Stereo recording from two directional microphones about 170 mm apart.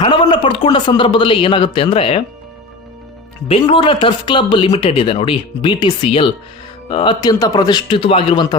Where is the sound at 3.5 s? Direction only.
30° left (ahead or behind).